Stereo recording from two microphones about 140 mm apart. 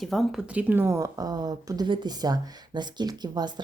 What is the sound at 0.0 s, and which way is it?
Speech, centre (ahead or behind).